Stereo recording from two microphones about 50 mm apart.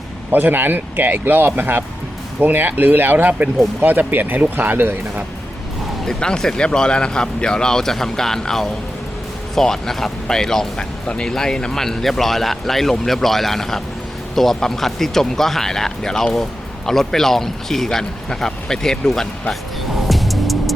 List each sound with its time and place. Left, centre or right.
0.3 s speech: right
6.1 s speech: centre
20.1 s music: centre